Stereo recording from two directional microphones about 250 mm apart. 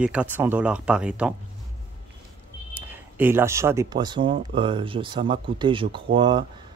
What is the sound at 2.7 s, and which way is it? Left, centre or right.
Speech, centre.